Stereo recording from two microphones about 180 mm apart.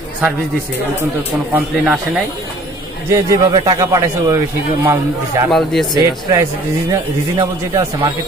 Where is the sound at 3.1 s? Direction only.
20° right (ahead or behind).